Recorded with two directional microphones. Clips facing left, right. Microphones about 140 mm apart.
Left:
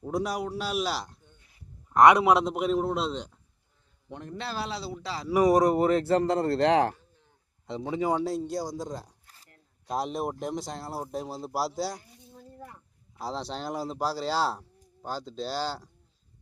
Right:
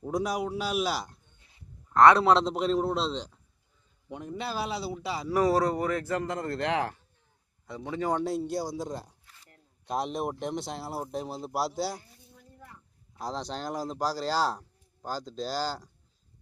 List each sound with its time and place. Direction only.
0.0 s speech: centre (ahead or behind)
1.9 s a man's voice: 15° left (ahead or behind); by 5.3 s 5° right (ahead or behind)
5.3 s speech: 15° left (ahead or behind); by 6.9 s 35° left (ahead or behind)
7.7 s a man's voice: 20° left (ahead or behind)
8.2 s speech: centre (ahead or behind)
9.2 s a sound: 40° left (ahead or behind)
9.8 s speech: centre (ahead or behind)
12.3 s a sound: 35° left (ahead or behind)
13.1 s speech: 5° left (ahead or behind)